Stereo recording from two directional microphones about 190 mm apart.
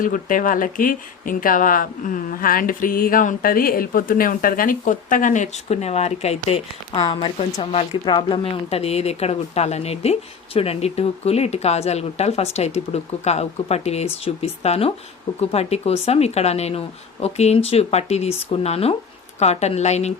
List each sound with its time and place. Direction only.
0.0 s speech: 45° left (ahead or behind)